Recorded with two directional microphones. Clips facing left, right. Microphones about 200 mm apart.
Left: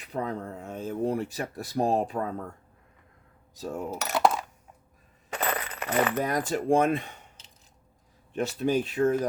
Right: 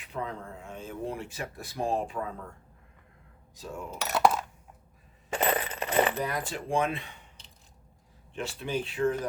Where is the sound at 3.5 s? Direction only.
40° left (ahead or behind).